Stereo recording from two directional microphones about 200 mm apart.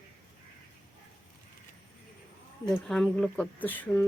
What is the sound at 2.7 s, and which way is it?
Speech, 5° left (ahead or behind).